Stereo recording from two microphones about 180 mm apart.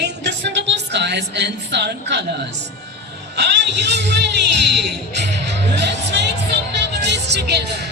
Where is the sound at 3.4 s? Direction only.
75° right (ahead or behind).